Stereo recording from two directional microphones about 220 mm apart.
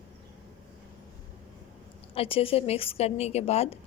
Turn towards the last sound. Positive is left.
turn(degrees=30)  # may be behind; listen again after turning